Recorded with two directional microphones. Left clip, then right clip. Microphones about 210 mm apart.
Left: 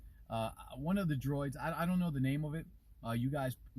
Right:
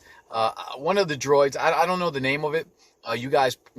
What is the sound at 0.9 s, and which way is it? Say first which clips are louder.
Speech: right 19 dB; 5° right (ahead or behind).